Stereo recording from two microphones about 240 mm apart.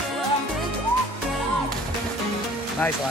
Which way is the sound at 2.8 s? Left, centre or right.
Centre.